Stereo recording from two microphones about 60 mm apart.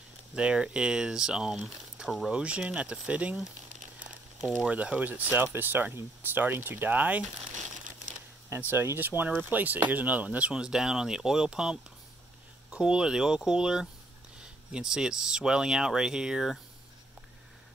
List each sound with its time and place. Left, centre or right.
0.4 s speech: centre
2.3 s speech: centre
4.6 s speech: right
8.5 s speech: right; by 16.5 s centre